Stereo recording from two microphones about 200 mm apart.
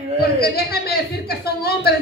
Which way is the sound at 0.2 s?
50° left (ahead or behind).